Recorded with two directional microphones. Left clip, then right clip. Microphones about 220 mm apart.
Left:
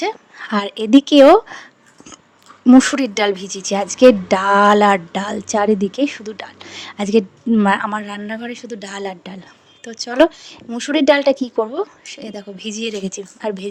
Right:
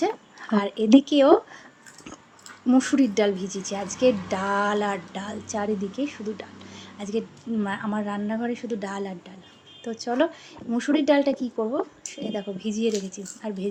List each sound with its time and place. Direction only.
0.0 s a woman's voice: 50° left (ahead or behind)
2.6 s speech: 50° left (ahead or behind)